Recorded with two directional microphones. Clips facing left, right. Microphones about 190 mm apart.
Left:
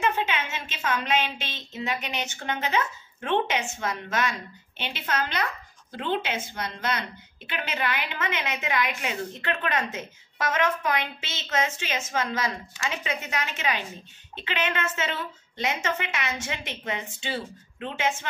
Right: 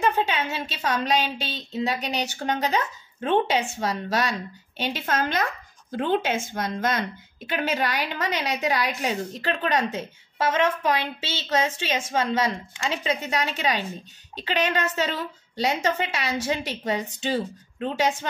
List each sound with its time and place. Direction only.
0.0 s a woman's voice: 40° right (ahead or behind)